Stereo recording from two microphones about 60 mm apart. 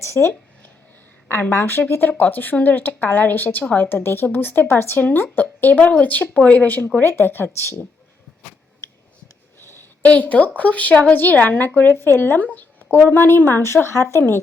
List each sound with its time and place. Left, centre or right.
0.0 s speech: left
1.3 s speech: left
7.0 s speech: left
9.6 s a sound: left
10.0 s speech: left
11.9 s speech: left
13.8 s speech: left